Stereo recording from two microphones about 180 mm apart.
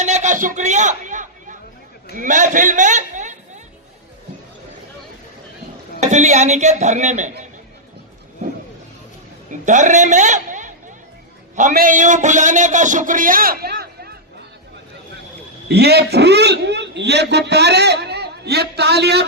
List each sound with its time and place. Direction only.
0.0 s a sound: 40° right (ahead or behind)
2.1 s a man's voice: 45° right (ahead or behind)
6.0 s a man's voice: 40° right (ahead or behind)
9.5 s a man's voice: 45° right (ahead or behind)
15.7 s a man's voice: 65° right (ahead or behind)